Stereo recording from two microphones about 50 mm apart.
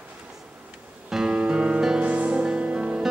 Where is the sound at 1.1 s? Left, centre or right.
Centre.